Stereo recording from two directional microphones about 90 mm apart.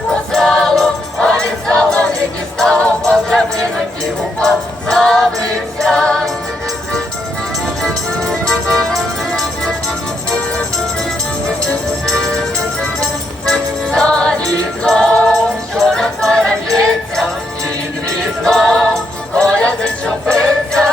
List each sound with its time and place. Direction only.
0.1 s music: 5° left (ahead or behind)
7.8 s music: 5° left (ahead or behind)
11.4 s music: 10° left (ahead or behind)
13.5 s music: 5° left (ahead or behind)